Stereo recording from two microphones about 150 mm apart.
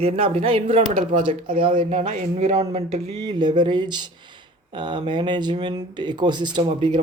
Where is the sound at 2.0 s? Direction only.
50° right (ahead or behind).